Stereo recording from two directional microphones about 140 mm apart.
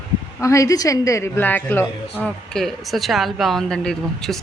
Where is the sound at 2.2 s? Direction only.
Centre (ahead or behind).